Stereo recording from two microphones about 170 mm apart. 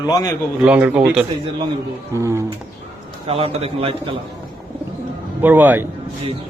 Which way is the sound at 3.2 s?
35° right (ahead or behind).